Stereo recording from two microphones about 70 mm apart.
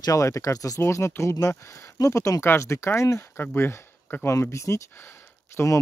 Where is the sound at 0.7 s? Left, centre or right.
Left.